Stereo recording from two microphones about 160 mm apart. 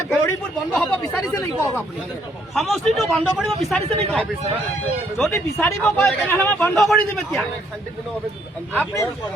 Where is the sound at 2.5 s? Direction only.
Centre (ahead or behind).